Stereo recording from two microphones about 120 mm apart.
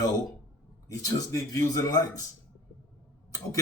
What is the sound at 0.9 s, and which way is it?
Speech, 30° left (ahead or behind).